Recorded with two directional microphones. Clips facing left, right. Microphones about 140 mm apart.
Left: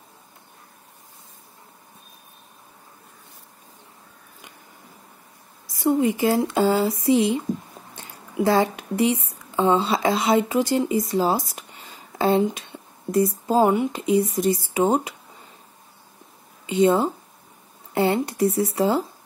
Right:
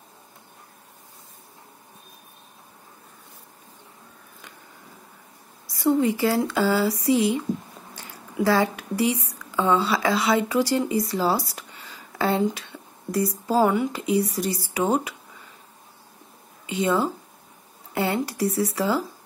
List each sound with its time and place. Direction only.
5.7 s speech: 15° left (ahead or behind)
16.7 s speech: 25° left (ahead or behind)